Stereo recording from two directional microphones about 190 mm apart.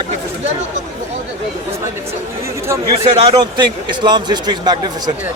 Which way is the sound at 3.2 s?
25° right (ahead or behind).